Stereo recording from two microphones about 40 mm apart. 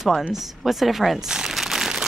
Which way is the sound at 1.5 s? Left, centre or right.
Centre.